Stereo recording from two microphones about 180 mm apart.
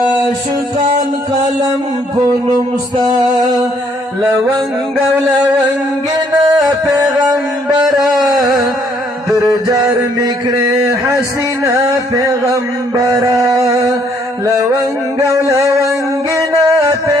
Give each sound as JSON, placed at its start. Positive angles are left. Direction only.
{"t": 2.9, "sound": "music", "side_deg": -20}
{"t": 6.4, "sound": "music", "side_deg": -20}
{"t": 9.4, "sound": "a sound", "side_deg": -20}
{"t": 14.4, "sound": "music", "side_deg": -15}
{"t": 15.5, "sound": "a sound", "side_deg": -15}
{"t": 15.9, "sound": "music", "side_deg": -15}